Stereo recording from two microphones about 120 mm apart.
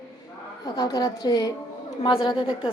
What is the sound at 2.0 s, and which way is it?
Speech, 45° left (ahead or behind).